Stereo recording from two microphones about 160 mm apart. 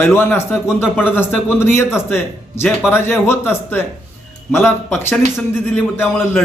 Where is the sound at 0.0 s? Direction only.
15° left (ahead or behind).